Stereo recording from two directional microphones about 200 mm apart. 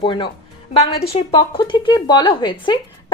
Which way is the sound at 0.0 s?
25° left (ahead or behind).